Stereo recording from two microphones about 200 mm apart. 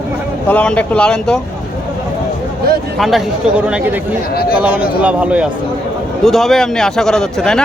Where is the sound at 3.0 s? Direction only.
Centre (ahead or behind).